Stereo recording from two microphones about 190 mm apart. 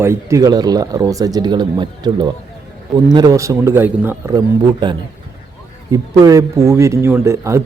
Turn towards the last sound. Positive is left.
turn(degrees=-15)  # may be behind; listen again after turning